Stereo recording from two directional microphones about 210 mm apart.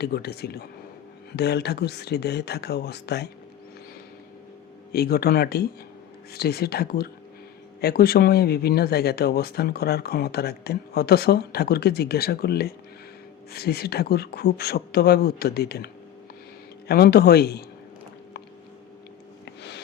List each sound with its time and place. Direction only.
0.0 s speech: 50° left (ahead or behind)
4.9 s speech: 45° left (ahead or behind)
16.9 s speech: 50° left (ahead or behind)
19.5 s a sound: 55° left (ahead or behind)